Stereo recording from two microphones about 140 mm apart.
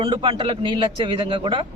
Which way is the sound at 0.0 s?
35° right (ahead or behind).